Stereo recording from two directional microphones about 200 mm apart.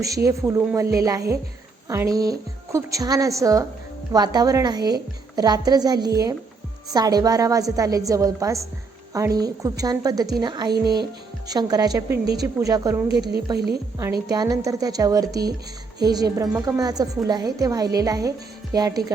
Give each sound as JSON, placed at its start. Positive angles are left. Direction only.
{"t": 0.3, "sound": "a woman's voice", "side_deg": -15}